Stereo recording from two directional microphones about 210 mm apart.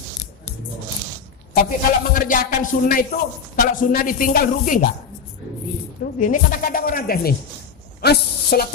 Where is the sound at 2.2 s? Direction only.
40° left (ahead or behind).